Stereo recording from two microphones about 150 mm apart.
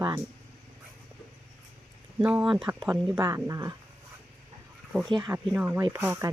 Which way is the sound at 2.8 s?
15° right (ahead or behind).